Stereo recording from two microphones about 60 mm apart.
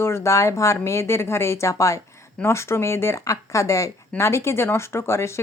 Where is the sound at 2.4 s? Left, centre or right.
Left.